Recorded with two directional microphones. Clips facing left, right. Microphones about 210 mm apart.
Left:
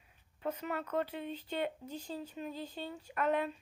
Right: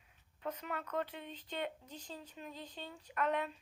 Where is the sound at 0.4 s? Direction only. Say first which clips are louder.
Left 4 dB; 5° left (ahead or behind).